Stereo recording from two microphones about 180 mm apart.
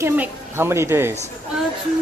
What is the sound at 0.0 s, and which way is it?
A woman's voice, 10° right (ahead or behind).